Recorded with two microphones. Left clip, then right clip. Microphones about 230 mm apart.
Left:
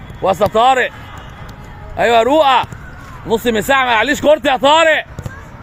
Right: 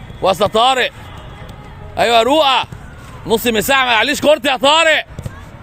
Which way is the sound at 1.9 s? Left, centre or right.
Centre.